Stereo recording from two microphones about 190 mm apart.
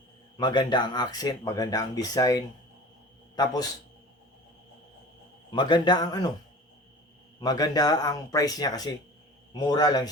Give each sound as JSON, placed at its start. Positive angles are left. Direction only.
{"t": 0.3, "sound": "speech", "side_deg": 20}
{"t": 5.5, "sound": "speech", "side_deg": 25}
{"t": 7.3, "sound": "speech", "side_deg": 20}